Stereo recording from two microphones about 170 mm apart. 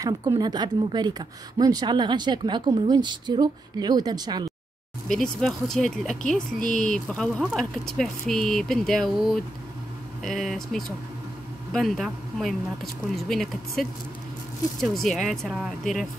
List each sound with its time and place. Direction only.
0.0 s speech: 20° right (ahead or behind)
5.0 s speech: 5° left (ahead or behind)